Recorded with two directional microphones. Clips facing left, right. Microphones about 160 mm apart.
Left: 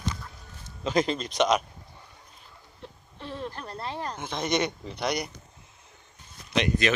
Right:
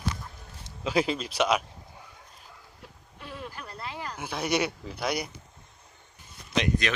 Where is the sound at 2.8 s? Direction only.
30° left (ahead or behind).